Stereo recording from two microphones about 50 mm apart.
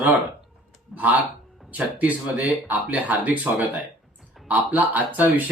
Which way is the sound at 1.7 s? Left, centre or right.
Right.